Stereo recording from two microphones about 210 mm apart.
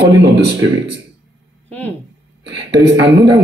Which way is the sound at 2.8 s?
55° right (ahead or behind).